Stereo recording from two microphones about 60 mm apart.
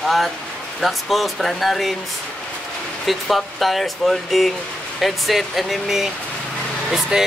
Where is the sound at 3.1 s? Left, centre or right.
Centre.